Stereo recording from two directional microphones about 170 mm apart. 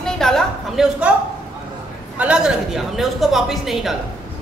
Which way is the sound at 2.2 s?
5° right (ahead or behind).